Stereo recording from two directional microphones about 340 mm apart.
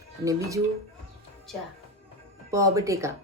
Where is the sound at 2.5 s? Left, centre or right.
Centre.